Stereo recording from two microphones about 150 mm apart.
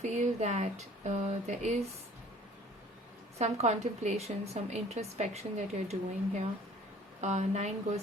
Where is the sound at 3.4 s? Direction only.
50° right (ahead or behind).